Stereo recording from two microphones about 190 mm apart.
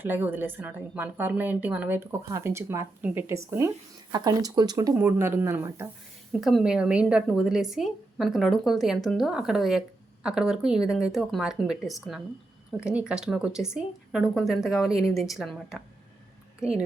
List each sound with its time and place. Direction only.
0.0 s a woman's voice: 10° right (ahead or behind)
6.3 s a woman's voice: centre (ahead or behind)